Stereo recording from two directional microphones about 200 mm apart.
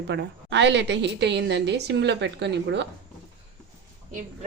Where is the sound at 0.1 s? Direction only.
60° right (ahead or behind).